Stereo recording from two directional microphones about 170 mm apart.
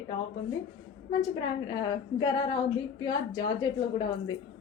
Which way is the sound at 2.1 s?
25° left (ahead or behind).